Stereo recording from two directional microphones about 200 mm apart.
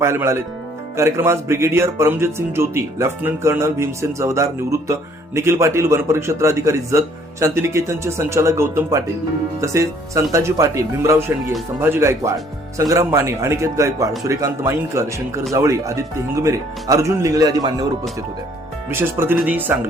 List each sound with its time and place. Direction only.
0.0 s speech: 15° right (ahead or behind)
18.9 s speech: 10° right (ahead or behind)